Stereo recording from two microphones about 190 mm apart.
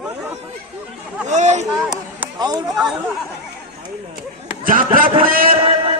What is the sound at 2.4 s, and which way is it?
Speech, 20° right (ahead or behind).